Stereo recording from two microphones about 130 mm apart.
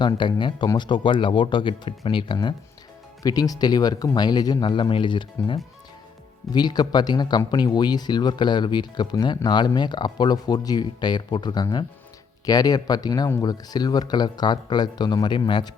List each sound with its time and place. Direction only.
0.0 s speech: 35° left (ahead or behind)
6.5 s speech: 30° left (ahead or behind)